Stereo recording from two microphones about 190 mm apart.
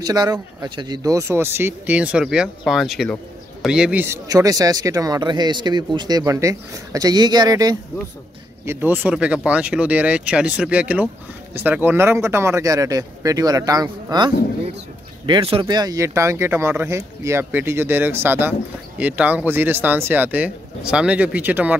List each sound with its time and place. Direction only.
0.0 s speech: 20° right (ahead or behind)